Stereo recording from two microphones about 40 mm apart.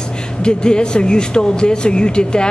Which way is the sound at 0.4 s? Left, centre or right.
Left.